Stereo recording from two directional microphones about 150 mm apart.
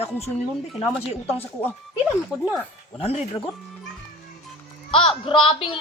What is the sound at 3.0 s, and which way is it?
Speech, 40° left (ahead or behind).